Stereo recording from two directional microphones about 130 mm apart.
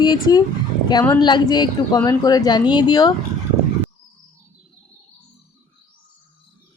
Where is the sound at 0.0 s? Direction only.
30° left (ahead or behind).